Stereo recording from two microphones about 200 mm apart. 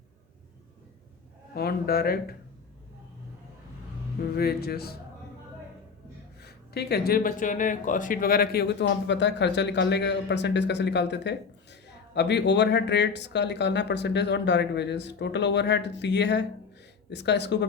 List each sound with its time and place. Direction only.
1.5 s speech: 50° left (ahead or behind)
4.2 s speech: 50° left (ahead or behind)
6.4 s speech: 55° left (ahead or behind)